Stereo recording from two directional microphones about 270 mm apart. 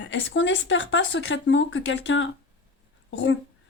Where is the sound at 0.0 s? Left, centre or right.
Left.